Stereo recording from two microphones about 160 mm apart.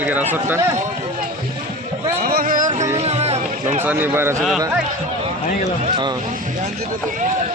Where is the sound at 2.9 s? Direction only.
40° right (ahead or behind).